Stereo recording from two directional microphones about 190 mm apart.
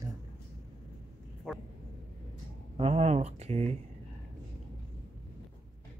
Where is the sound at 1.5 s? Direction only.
Centre (ahead or behind).